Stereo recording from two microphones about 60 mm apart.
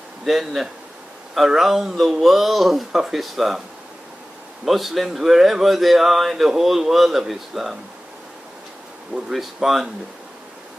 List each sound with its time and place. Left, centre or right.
0.2 s speech: centre
4.6 s speech: centre
9.3 s speech: centre